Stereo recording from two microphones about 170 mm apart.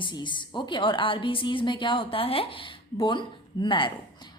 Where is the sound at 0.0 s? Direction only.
30° left (ahead or behind).